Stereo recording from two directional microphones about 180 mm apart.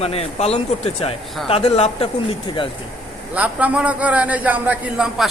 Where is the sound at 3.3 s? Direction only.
10° right (ahead or behind).